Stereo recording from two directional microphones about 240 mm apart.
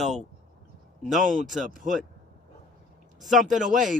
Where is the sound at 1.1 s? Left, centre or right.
Centre.